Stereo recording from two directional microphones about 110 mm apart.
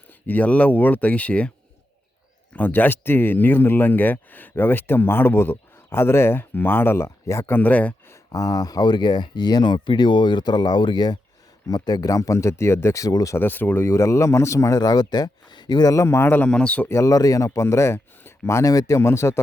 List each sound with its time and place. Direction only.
0.3 s speech: 15° left (ahead or behind)
2.6 s speech: 15° left (ahead or behind)
8.1 s speech: 35° left (ahead or behind); by 16.9 s 10° left (ahead or behind)
16.9 s speech: 30° left (ahead or behind)